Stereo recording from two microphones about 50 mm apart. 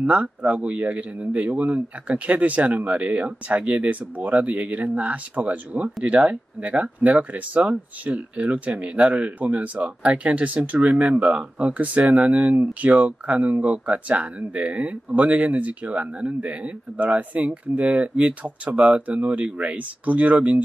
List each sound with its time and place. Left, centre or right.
0.0 s speech: right